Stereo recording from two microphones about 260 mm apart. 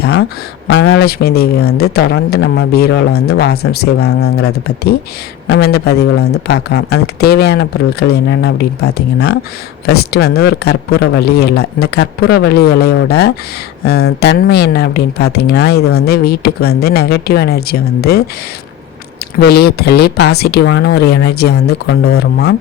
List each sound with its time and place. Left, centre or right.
0.7 s speech: left
9.1 s speech: left
9.8 s speech: left
19.4 s speech: left